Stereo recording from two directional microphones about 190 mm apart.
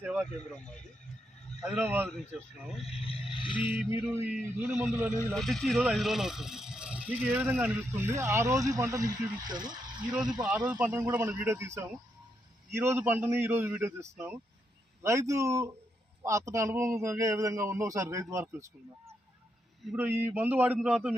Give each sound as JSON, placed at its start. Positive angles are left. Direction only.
{"t": 0.0, "sound": "a sound", "side_deg": -5}
{"t": 1.6, "sound": "speech", "side_deg": -10}
{"t": 2.8, "sound": "a sound", "side_deg": 30}
{"t": 3.8, "sound": "speech", "side_deg": -10}
{"t": 5.3, "sound": "speech", "side_deg": 0}
{"t": 10.4, "sound": "speech", "side_deg": -5}